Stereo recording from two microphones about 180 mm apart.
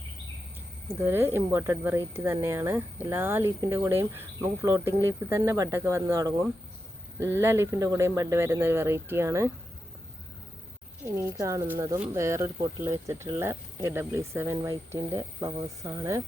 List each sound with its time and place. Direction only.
0.9 s speech: 10° right (ahead or behind)
11.0 s speech: 15° right (ahead or behind)